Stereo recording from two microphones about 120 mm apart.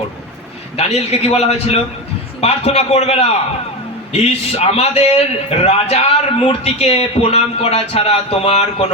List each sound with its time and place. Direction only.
0.8 s a man's voice: 60° left (ahead or behind)